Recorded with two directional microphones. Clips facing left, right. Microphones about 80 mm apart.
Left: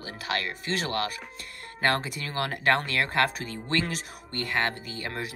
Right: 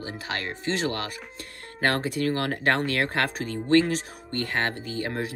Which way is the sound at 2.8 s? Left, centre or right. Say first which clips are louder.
Even; right.